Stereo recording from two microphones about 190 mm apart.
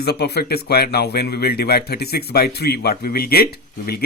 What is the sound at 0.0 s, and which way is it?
Speech, 60° left (ahead or behind).